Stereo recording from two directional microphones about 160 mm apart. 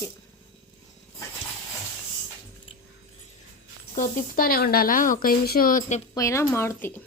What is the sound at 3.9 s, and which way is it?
Speech, 55° left (ahead or behind).